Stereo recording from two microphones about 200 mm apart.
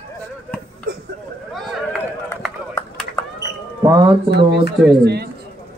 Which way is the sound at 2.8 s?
15° left (ahead or behind).